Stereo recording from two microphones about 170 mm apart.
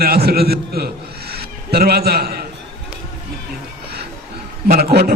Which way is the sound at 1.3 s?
65° right (ahead or behind).